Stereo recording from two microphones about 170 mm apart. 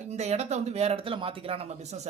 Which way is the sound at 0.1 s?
40° right (ahead or behind).